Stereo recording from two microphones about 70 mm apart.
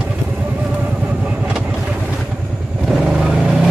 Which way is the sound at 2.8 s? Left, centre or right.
Centre.